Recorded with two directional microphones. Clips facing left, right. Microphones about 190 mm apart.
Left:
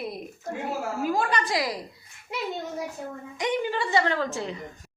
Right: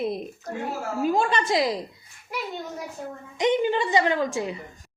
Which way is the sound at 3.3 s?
20° right (ahead or behind).